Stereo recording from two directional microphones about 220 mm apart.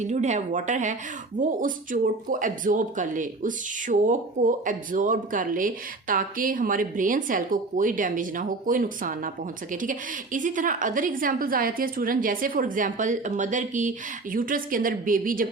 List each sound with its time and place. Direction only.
0.0 s speech: 30° right (ahead or behind)